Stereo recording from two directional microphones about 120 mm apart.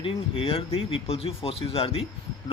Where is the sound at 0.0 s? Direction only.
50° left (ahead or behind).